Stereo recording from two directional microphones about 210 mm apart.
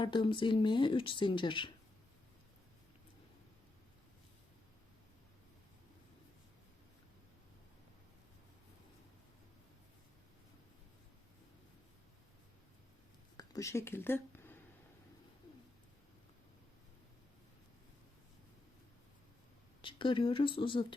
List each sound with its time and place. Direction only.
0.0 s speech: 25° left (ahead or behind)
13.3 s a sound: 15° left (ahead or behind)
19.8 s speech: 25° left (ahead or behind)